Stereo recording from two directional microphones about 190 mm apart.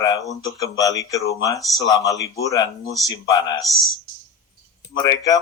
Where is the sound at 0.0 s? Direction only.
20° left (ahead or behind).